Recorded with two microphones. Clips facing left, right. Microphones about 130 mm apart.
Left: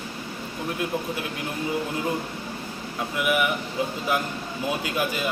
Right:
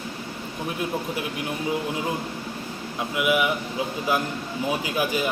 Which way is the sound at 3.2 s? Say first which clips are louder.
Right 2 dB; 10° right (ahead or behind).